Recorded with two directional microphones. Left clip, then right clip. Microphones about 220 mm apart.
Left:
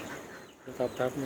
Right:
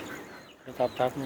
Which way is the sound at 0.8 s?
20° right (ahead or behind).